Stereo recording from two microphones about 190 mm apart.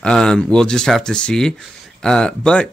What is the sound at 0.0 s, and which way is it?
Speech, 5° left (ahead or behind).